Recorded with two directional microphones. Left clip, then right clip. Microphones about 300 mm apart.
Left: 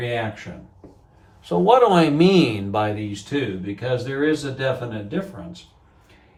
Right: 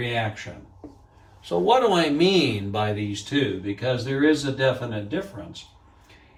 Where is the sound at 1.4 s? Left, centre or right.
Centre.